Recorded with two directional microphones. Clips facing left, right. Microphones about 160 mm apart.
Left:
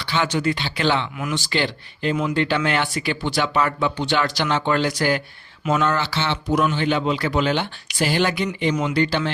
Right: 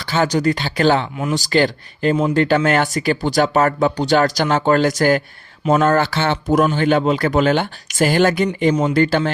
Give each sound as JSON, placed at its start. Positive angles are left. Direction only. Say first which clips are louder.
{"t": 0.0, "sound": "speech", "louder": "right 5 dB", "side_deg": -45}